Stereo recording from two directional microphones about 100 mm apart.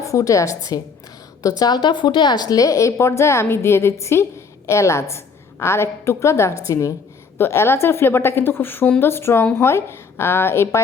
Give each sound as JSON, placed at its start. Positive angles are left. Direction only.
{"t": 0.0, "sound": "a woman's voice", "side_deg": 35}